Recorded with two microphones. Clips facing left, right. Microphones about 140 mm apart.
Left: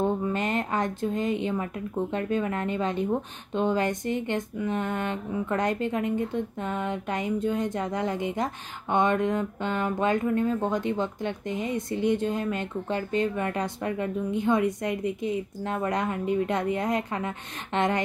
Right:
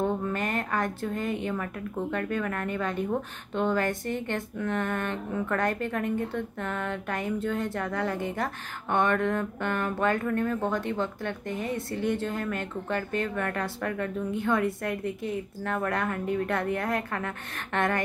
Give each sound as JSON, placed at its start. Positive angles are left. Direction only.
{"t": 0.0, "sound": "a woman's voice", "side_deg": 20}